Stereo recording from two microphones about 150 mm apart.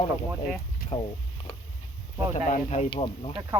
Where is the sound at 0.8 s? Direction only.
75° left (ahead or behind).